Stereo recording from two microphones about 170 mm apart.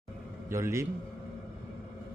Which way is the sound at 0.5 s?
15° right (ahead or behind).